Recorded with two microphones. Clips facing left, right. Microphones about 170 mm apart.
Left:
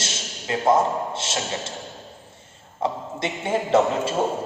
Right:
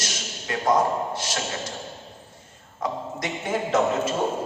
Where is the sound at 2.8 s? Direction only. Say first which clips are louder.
Left 3 dB; 25° left (ahead or behind).